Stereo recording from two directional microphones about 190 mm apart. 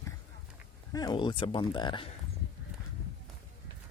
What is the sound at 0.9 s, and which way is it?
Speech, 20° left (ahead or behind).